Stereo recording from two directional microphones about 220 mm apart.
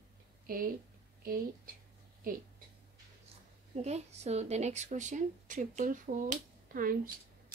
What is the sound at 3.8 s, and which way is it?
A woman's voice, 30° right (ahead or behind).